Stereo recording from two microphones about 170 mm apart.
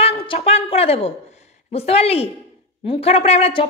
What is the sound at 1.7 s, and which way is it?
A woman's voice, 35° left (ahead or behind).